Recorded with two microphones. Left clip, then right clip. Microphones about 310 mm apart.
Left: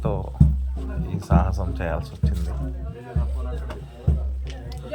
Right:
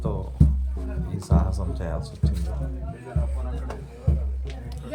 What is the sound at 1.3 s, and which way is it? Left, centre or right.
Speech, centre.